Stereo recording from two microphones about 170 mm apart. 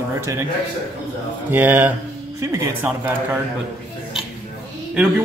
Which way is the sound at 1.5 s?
10° right (ahead or behind).